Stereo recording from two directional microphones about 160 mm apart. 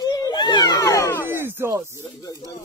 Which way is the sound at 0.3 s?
25° left (ahead or behind).